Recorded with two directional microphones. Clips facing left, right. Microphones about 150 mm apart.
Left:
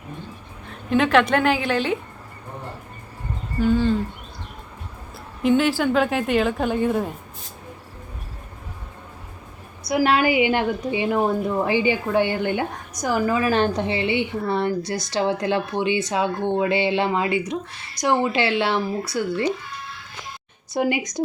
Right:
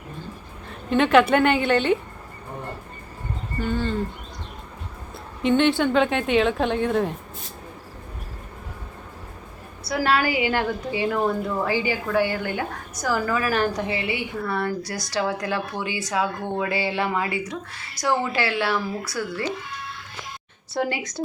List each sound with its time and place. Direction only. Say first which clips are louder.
0.7 s a woman's voice: even; centre (ahead or behind)
3.6 s a woman's voice: left 7 dB; 5° left (ahead or behind)
5.4 s a woman's voice: even; 5° left (ahead or behind)
9.8 s a woman's voice: left 3 dB; 20° left (ahead or behind)
20.7 s speech: left 4 dB; 15° left (ahead or behind)